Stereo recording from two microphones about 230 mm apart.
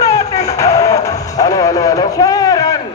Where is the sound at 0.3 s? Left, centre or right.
Centre.